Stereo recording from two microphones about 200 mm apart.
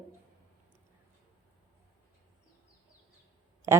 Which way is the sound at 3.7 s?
15° right (ahead or behind).